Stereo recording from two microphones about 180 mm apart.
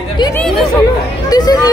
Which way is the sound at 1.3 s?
20° left (ahead or behind).